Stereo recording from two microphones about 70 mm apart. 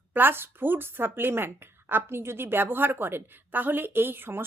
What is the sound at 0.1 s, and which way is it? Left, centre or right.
Speech, right.